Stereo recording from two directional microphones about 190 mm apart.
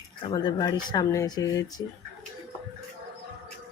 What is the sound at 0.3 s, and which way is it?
Speech, 20° left (ahead or behind).